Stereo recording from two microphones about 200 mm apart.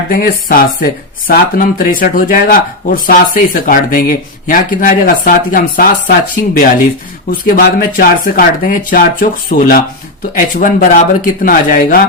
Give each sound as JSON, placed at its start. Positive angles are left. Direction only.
{"t": 0.1, "sound": "speech", "side_deg": 45}